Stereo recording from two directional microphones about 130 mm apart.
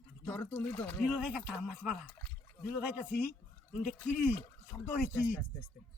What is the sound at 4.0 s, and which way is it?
Speech, 15° left (ahead or behind).